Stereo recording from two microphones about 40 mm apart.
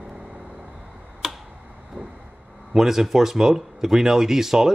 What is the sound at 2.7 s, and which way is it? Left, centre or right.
Speech, centre.